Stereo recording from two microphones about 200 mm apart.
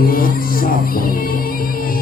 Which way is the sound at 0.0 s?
45° left (ahead or behind).